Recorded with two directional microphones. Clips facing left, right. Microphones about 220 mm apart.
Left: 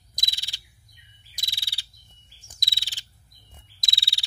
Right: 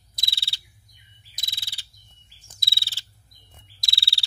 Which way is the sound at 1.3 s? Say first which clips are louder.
Left 1 dB; 15° left (ahead or behind).